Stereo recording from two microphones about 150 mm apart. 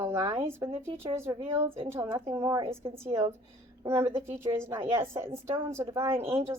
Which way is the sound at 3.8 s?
15° right (ahead or behind).